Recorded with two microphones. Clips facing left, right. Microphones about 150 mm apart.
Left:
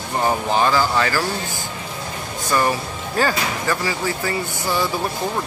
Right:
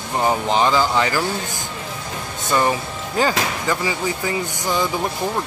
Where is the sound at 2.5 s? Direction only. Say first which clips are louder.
Right 1 dB; 20° right (ahead or behind).